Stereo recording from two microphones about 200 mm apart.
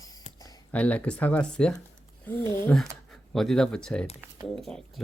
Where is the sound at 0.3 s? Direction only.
20° left (ahead or behind).